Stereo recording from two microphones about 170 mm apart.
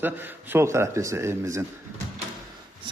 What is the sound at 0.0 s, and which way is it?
Speech, 10° right (ahead or behind).